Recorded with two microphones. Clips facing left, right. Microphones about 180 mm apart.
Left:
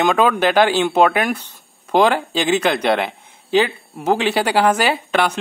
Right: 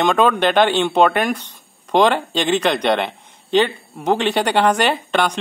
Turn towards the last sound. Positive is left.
turn(degrees=5)  # may be behind; listen again after turning